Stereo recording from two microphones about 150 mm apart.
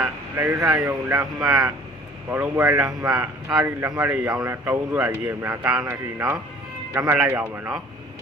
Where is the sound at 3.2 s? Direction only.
10° right (ahead or behind).